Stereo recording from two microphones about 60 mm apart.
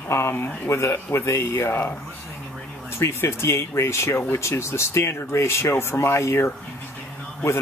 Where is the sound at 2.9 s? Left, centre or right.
Left.